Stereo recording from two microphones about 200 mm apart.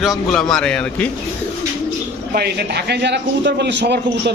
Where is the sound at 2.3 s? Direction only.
55° right (ahead or behind).